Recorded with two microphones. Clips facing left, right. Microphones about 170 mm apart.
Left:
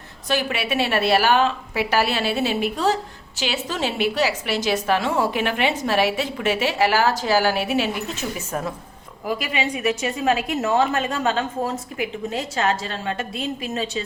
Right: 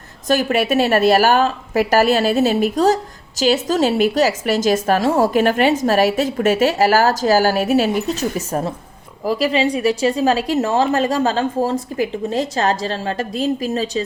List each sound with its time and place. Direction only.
0.3 s a woman's voice: 45° right (ahead or behind)